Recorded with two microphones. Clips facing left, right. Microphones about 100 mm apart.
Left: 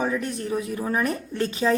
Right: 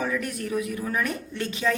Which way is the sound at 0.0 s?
30° left (ahead or behind).